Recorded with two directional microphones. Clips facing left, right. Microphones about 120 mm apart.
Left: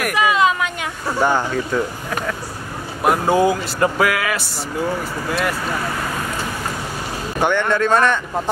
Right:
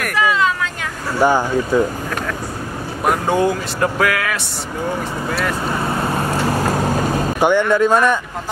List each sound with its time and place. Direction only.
0.0 s a sound: 15° left (ahead or behind)
1.2 s speech: 10° right (ahead or behind)
3.0 s speech: 5° left (ahead or behind)
5.8 s vehicle: 25° right (ahead or behind); by 7.1 s 45° right (ahead or behind)
7.3 s speech: 10° right (ahead or behind)